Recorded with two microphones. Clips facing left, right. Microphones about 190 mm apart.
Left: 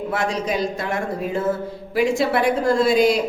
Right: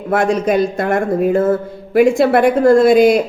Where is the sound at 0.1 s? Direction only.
55° right (ahead or behind).